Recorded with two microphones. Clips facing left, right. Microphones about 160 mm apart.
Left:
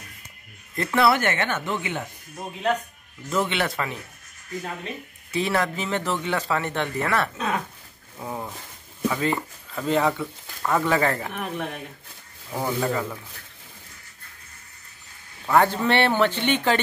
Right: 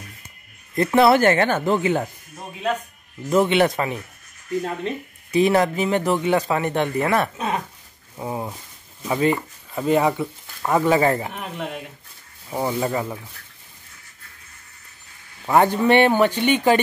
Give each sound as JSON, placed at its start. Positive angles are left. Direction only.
{"t": 0.7, "sound": "speech", "side_deg": -20}
{"t": 1.1, "sound": "speech", "side_deg": -35}
{"t": 3.3, "sound": "speech", "side_deg": -15}
{"t": 5.3, "sound": "speech", "side_deg": -20}
{"t": 8.2, "sound": "a sound", "side_deg": -20}
{"t": 9.1, "sound": "speech", "side_deg": -20}
{"t": 15.4, "sound": "speech", "side_deg": -15}